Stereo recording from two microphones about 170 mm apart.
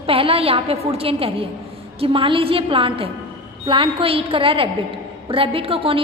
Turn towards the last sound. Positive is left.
turn(degrees=-35)  # may be behind; listen again after turning